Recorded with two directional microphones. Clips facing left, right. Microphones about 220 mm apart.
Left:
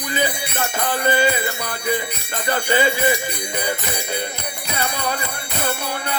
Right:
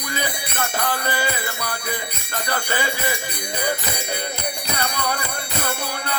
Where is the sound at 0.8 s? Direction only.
20° left (ahead or behind).